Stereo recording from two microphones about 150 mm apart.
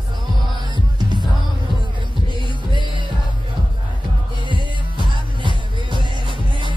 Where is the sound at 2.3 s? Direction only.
35° right (ahead or behind).